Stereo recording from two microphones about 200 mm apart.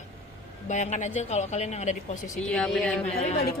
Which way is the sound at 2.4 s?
5° left (ahead or behind).